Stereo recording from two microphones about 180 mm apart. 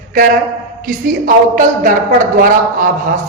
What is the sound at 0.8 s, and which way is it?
A woman's voice, 50° right (ahead or behind).